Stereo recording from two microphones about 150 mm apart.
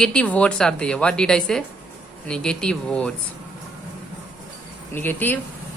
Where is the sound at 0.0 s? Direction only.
5° left (ahead or behind).